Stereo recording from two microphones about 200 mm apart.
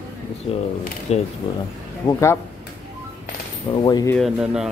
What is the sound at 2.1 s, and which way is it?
Speech, 15° left (ahead or behind).